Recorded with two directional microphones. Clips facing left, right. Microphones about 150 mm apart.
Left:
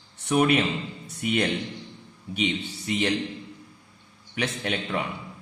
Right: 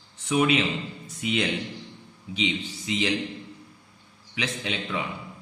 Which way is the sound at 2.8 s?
60° left (ahead or behind).